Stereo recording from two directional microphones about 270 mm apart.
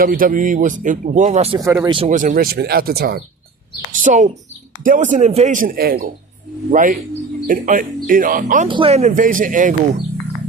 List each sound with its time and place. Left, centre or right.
0.0 s speech: right
8.6 s speech: centre